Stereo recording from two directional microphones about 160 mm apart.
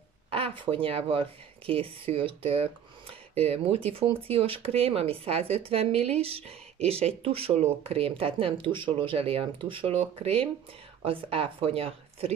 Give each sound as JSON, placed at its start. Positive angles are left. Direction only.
{"t": 0.3, "sound": "speech", "side_deg": -35}